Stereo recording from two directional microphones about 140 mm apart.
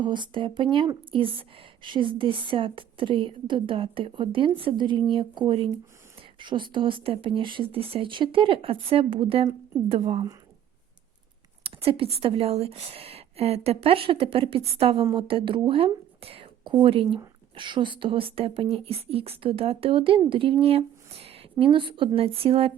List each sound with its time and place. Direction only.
0.0 s a woman's voice: 35° right (ahead or behind)
11.6 s a woman's voice: 45° right (ahead or behind)